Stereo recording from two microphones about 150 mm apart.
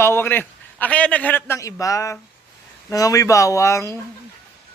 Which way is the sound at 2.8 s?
25° left (ahead or behind).